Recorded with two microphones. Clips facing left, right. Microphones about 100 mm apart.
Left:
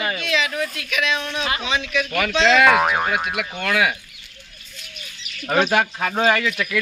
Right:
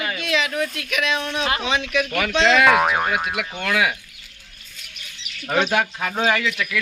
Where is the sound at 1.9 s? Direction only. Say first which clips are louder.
Left 1 dB; 10° right (ahead or behind).